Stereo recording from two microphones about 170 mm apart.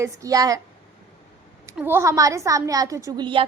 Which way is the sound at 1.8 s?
15° right (ahead or behind).